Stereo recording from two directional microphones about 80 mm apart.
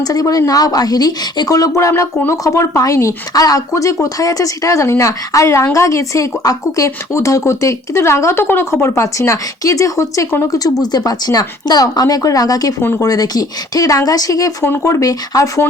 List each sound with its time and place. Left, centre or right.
0.0 s a woman's voice: left
14.6 s speech: left